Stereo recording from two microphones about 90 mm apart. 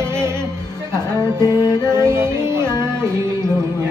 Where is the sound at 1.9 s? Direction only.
30° right (ahead or behind).